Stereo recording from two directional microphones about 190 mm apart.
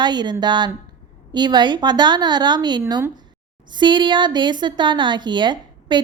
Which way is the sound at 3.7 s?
25° right (ahead or behind).